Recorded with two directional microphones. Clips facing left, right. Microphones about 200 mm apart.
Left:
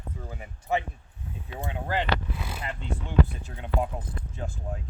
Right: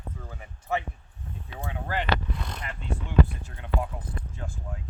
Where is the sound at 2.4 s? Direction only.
5° left (ahead or behind).